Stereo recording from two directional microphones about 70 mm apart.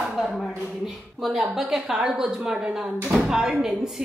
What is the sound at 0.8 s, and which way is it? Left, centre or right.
A woman's voice, centre.